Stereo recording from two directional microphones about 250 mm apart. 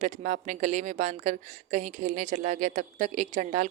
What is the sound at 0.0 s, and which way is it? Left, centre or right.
A woman's voice, right.